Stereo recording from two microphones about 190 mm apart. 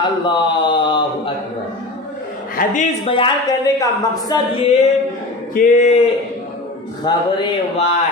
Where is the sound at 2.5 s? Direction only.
40° left (ahead or behind).